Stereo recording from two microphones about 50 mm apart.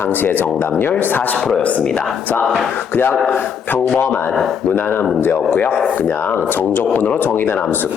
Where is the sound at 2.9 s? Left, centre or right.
Left.